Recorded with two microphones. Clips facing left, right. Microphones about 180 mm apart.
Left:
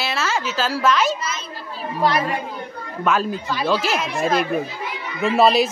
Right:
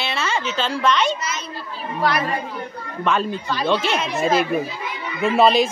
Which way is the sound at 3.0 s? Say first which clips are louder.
Left 1 dB; 5° left (ahead or behind).